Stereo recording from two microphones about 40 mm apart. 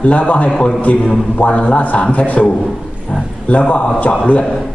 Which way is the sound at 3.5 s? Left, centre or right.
Left.